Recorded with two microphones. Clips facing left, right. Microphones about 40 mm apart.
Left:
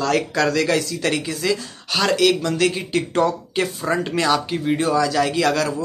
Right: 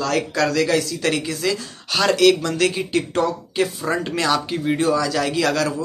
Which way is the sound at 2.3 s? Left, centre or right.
Centre.